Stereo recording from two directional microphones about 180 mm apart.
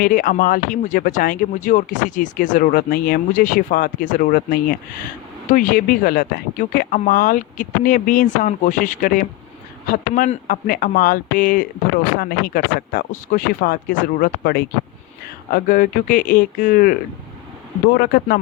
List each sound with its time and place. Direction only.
0.0 s speech: 50° left (ahead or behind)